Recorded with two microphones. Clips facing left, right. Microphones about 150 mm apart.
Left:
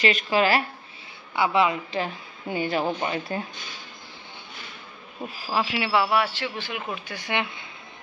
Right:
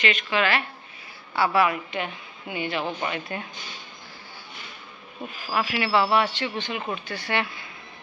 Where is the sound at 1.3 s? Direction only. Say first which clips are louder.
Even; 20° left (ahead or behind).